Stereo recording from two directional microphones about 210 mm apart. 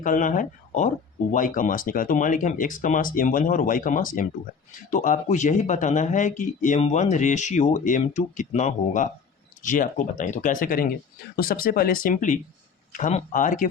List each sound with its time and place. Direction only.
0.0 s speech: 40° left (ahead or behind)